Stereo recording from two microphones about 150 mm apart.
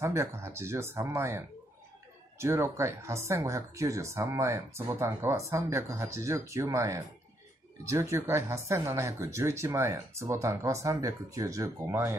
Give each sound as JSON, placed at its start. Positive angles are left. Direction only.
{"t": 0.0, "sound": "speech", "side_deg": -20}